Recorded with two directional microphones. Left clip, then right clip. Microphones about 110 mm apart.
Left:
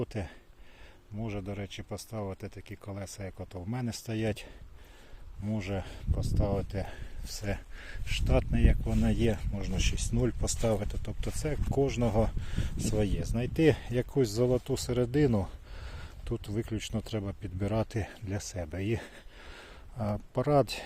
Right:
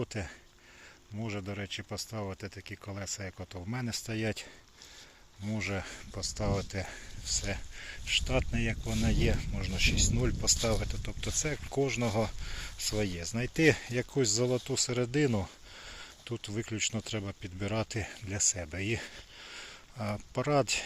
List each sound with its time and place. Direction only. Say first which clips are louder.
0.0 s speech: left 1 dB; 30° left (ahead or behind)
1.2 s speech: even; 10° left (ahead or behind)
3.7 s speech: right 1 dB; 30° left (ahead or behind)
5.5 s speech: right 1 dB; 30° left (ahead or behind)
7.3 s speech: right 3 dB; 50° left (ahead or behind)
8.3 s speech: left 2 dB; 40° left (ahead or behind)
9.6 s speech: right 7 dB; 35° left (ahead or behind)
15.8 s speech: right 4 dB; 55° left (ahead or behind)
19.1 s a sound: right 3 dB; 70° left (ahead or behind); by 20.8 s 50° left (ahead or behind)